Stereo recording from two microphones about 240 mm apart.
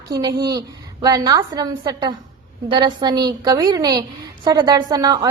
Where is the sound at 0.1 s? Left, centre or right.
Centre.